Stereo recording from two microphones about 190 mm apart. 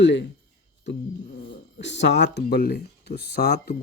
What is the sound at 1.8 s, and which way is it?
Speech, 70° left (ahead or behind).